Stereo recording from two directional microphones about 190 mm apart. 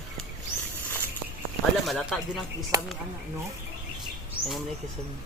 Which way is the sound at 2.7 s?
20° right (ahead or behind).